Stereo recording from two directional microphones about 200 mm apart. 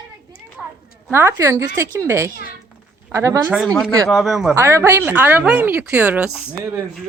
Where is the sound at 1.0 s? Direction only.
10° right (ahead or behind).